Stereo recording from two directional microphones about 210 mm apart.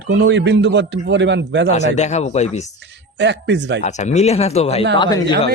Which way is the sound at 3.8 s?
30° left (ahead or behind).